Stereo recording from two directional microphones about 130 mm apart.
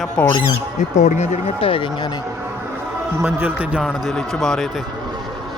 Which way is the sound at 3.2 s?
20° right (ahead or behind).